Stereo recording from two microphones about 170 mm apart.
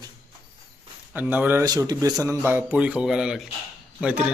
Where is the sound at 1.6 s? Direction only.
20° right (ahead or behind).